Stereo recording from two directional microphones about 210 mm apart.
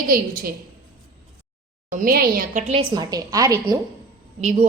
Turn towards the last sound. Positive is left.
turn(degrees=-35)  # may be behind; listen again after turning